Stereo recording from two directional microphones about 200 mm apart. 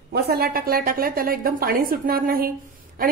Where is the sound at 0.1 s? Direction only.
50° right (ahead or behind).